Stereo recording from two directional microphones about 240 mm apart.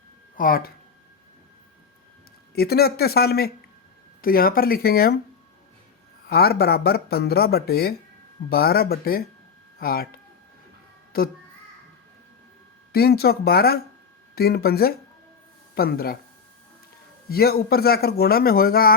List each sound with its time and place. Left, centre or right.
0.3 s speech: left
2.6 s speech: left
6.2 s speech: left
12.9 s speech: left
17.2 s speech: left